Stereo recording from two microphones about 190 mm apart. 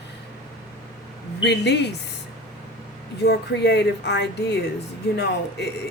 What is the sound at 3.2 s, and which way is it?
Speech, 60° left (ahead or behind).